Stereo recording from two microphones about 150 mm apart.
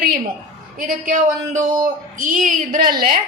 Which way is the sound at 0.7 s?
65° right (ahead or behind).